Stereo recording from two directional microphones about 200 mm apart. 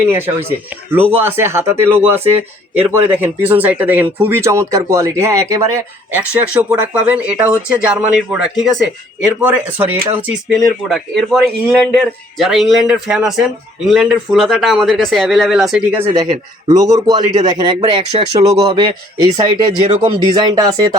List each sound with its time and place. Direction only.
0.0 s speech: 10° right (ahead or behind)